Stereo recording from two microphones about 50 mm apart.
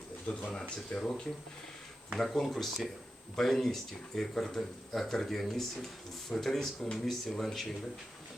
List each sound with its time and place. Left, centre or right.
0.5 s speech: left; by 7.7 s centre